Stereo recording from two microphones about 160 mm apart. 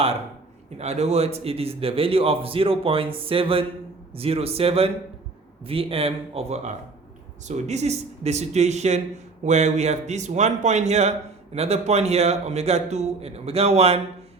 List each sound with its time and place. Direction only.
0.8 s a man's voice: 40° right (ahead or behind)